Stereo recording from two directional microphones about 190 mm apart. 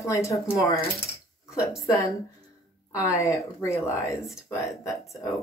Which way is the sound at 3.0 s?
15° left (ahead or behind).